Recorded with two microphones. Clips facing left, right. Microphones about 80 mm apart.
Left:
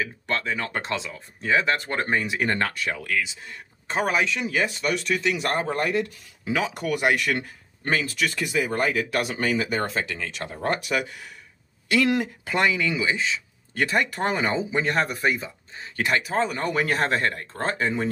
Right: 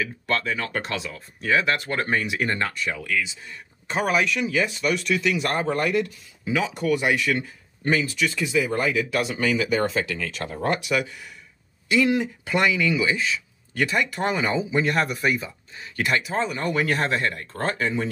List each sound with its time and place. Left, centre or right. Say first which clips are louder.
0.0 s speech: right 2 dB; left
4.5 s speech: right 1 dB; left
6.9 s speech: right 1 dB; left
7.8 s speech: right 2 dB; left
10.7 s speech: right 1 dB; left
11.9 s speech: right 1 dB; left
12.5 s speech: right 2 dB; left